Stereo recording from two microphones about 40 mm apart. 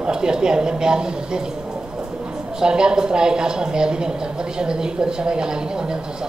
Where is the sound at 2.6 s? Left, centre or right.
Centre.